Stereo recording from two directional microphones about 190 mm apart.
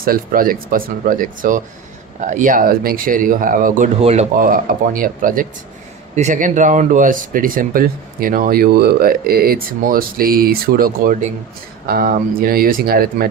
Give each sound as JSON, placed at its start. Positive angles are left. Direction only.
{"t": 0.0, "sound": "speech", "side_deg": -50}
{"t": 4.0, "sound": "speech", "side_deg": -35}